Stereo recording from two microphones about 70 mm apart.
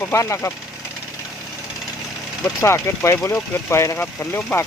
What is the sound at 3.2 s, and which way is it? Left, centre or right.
Speech, left.